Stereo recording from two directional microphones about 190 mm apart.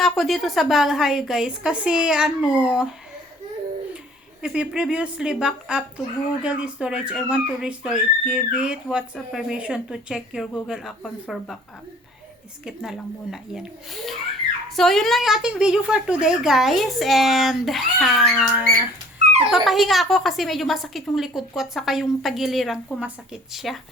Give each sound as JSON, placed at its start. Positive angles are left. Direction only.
{"t": 0.0, "sound": "speech", "side_deg": 0}
{"t": 4.4, "sound": "speech", "side_deg": -5}
{"t": 12.6, "sound": "speech", "side_deg": 0}
{"t": 19.2, "sound": "dog", "side_deg": -35}
{"t": 19.5, "sound": "speech", "side_deg": 0}